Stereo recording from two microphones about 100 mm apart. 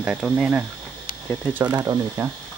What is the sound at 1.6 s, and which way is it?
Speech, 40° right (ahead or behind).